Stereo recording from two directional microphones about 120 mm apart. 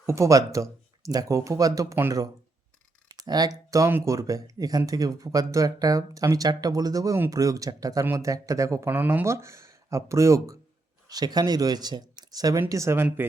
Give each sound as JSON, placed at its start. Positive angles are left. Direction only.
{"t": 0.0, "sound": "speech", "side_deg": -25}